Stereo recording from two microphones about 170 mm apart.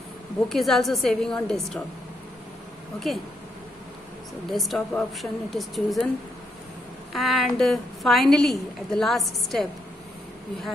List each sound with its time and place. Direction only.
0.5 s a woman's voice: centre (ahead or behind)
3.1 s a woman's voice: centre (ahead or behind)
4.5 s a woman's voice: centre (ahead or behind)
7.1 s a woman's voice: centre (ahead or behind)